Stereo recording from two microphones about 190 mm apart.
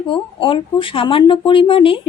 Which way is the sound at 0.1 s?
25° left (ahead or behind).